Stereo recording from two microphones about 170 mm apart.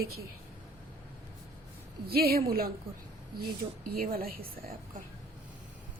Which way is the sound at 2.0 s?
65° right (ahead or behind).